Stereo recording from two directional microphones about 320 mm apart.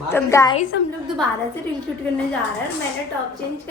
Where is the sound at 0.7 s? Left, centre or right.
Left.